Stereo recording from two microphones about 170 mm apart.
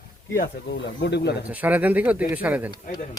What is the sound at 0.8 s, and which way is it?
Speech, 90° left.